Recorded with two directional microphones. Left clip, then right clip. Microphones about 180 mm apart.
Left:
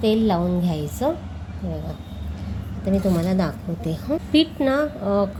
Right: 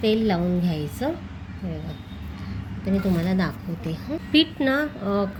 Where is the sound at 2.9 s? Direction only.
10° left (ahead or behind).